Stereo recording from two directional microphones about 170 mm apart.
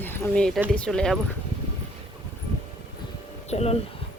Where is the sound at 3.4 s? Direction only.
40° left (ahead or behind).